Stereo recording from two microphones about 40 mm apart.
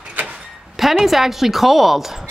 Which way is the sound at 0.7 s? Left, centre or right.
Centre.